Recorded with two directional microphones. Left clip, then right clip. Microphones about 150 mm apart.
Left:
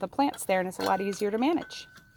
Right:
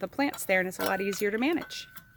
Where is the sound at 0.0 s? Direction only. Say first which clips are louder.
Left 3 dB; 5° left (ahead or behind).